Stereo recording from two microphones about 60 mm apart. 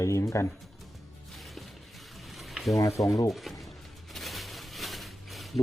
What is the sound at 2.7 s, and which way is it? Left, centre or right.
Speech, left.